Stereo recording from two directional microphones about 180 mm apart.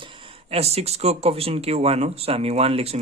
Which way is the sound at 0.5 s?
35° right (ahead or behind).